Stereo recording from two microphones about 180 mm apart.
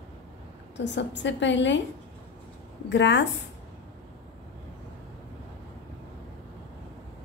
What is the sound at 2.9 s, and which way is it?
Speech, 80° left.